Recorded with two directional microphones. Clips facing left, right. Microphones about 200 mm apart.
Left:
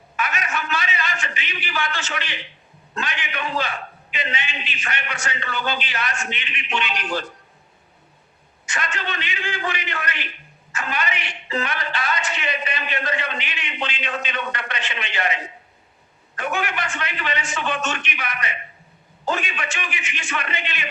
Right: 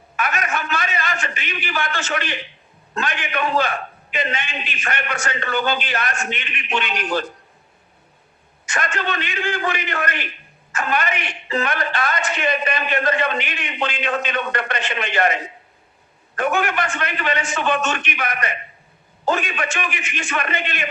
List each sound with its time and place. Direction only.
0.2 s a sound: 50° right (ahead or behind)
2.9 s a man's voice: 50° right (ahead or behind)
8.6 s a man's voice: 50° right (ahead or behind)